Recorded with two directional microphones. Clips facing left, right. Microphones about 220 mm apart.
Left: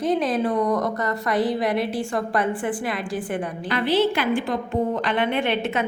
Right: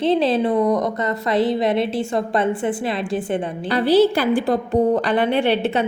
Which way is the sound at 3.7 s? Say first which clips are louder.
Right 6 dB; 35° right (ahead or behind).